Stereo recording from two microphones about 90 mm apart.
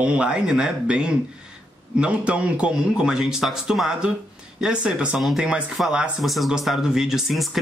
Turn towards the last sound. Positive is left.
turn(degrees=0)  # may be behind; listen again after turning